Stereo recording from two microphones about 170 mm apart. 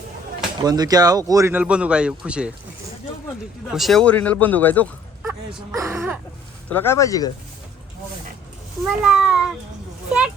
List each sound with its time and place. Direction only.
0.6 s a man's voice: 25° right (ahead or behind); by 2.5 s 5° right (ahead or behind)
3.7 s speech: centre (ahead or behind)
5.7 s a man's voice: 15° right (ahead or behind)
6.7 s speech: 10° left (ahead or behind)
9.0 s meow: 5° right (ahead or behind)
10.1 s speech: 5° right (ahead or behind)